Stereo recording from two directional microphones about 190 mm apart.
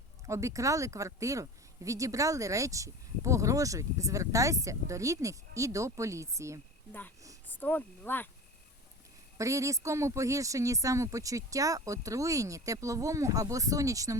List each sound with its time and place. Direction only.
0.3 s speech: 15° right (ahead or behind)
7.4 s speech: 10° left (ahead or behind)
9.4 s speech: 15° right (ahead or behind)